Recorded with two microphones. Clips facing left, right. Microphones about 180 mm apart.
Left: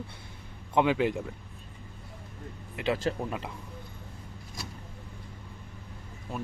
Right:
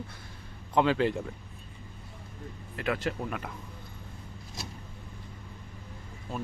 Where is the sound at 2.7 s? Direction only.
25° left (ahead or behind).